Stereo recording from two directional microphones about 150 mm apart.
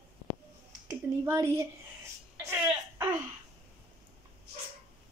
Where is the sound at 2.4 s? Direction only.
15° right (ahead or behind).